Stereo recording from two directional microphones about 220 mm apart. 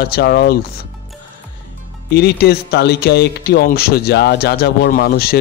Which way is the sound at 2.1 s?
45° left (ahead or behind).